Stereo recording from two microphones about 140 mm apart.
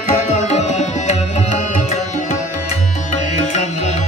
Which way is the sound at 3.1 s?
55° left (ahead or behind).